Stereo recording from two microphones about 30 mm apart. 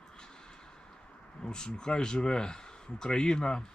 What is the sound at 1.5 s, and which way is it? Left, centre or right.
Speech, left.